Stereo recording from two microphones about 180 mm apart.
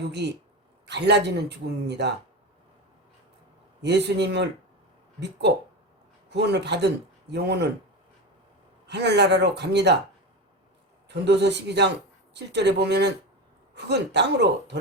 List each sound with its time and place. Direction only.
0.2 s speech: 70° right (ahead or behind)
3.8 s speech: 70° right (ahead or behind)
6.3 s speech: 70° right (ahead or behind)
8.9 s speech: 70° right (ahead or behind)
11.1 s speech: 70° right (ahead or behind)